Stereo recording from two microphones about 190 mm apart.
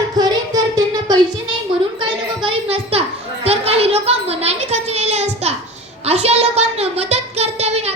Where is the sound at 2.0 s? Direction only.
25° right (ahead or behind).